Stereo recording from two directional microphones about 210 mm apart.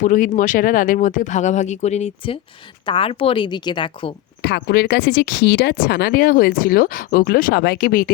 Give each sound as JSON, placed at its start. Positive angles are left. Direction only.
{"t": 0.0, "sound": "speech", "side_deg": 40}
{"t": 4.4, "sound": "speech", "side_deg": 50}